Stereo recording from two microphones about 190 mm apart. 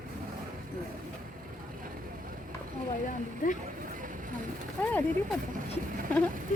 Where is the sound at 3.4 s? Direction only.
45° left (ahead or behind).